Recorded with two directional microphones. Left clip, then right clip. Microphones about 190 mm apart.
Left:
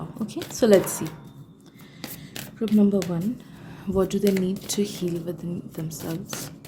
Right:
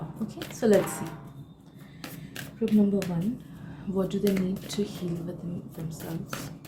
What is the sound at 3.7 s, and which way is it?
Speech, 55° left (ahead or behind).